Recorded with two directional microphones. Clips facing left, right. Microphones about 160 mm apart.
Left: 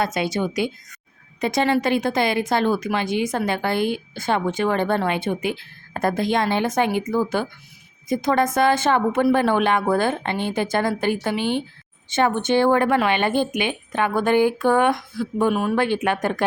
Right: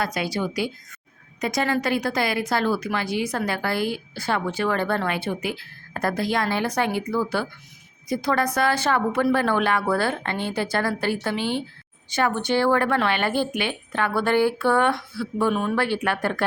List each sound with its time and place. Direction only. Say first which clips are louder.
0.0 s a woman's voice: left 3 dB; 25° left (ahead or behind)